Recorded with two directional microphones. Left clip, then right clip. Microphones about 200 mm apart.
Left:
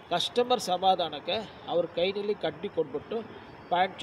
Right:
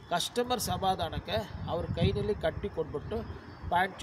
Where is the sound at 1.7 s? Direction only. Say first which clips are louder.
Left 7 dB; 75° right (ahead or behind).